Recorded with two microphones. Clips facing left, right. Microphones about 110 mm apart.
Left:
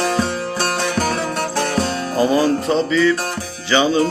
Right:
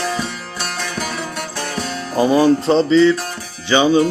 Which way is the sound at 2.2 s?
20° right (ahead or behind).